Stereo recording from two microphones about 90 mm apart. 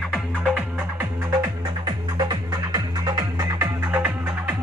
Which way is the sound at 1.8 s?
50° right (ahead or behind).